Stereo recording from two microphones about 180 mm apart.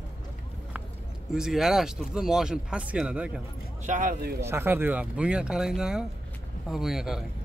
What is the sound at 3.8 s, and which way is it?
Speech, 45° right (ahead or behind).